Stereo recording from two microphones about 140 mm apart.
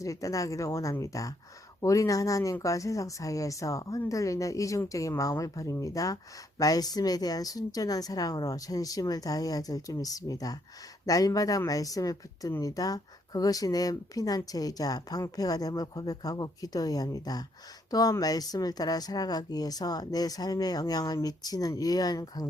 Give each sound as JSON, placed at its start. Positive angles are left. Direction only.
{"t": 0.0, "sound": "speech", "side_deg": 25}